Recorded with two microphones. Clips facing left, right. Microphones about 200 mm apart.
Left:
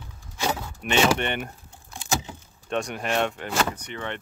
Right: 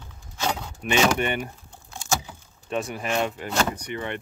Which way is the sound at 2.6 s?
5° right (ahead or behind).